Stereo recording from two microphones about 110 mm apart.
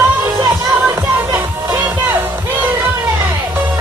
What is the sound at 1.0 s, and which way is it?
Music, 20° right (ahead or behind).